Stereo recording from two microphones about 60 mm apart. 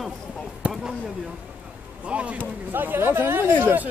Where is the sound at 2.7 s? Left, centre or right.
Right.